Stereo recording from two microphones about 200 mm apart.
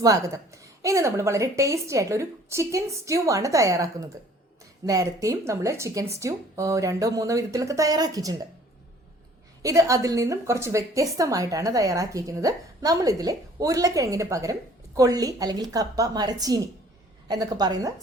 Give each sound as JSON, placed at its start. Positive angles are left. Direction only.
{"t": 0.0, "sound": "a woman's voice", "side_deg": -15}
{"t": 4.9, "sound": "a woman's voice", "side_deg": -15}
{"t": 9.6, "sound": "a woman's voice", "side_deg": -15}